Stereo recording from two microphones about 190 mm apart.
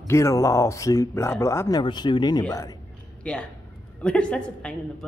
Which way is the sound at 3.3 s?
5° left (ahead or behind).